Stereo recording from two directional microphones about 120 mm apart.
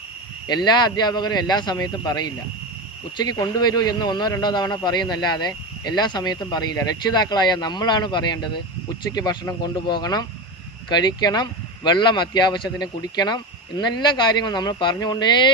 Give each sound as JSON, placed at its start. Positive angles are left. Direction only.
{"t": 0.4, "sound": "a man's voice", "side_deg": 35}